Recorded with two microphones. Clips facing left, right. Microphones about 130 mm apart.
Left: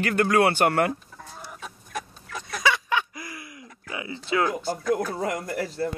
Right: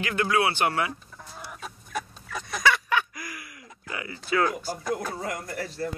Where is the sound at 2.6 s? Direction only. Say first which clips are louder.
Even; 20° left (ahead or behind).